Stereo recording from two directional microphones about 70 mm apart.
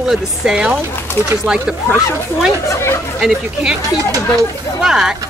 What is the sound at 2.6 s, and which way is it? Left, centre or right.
Speech, left.